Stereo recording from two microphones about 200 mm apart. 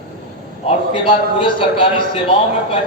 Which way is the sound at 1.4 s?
25° left (ahead or behind).